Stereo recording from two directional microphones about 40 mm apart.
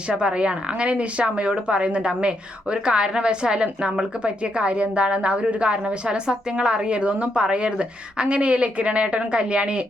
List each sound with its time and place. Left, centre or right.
0.1 s speech: right